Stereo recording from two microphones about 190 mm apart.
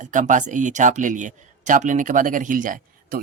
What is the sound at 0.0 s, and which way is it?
Speech, 40° right (ahead or behind).